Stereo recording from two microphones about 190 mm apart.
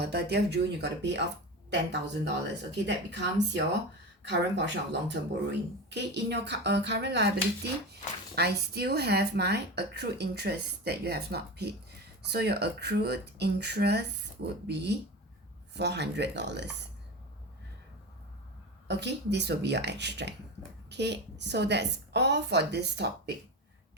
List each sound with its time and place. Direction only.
0.0 s speech: 60° right (ahead or behind)
18.9 s speech: 65° right (ahead or behind)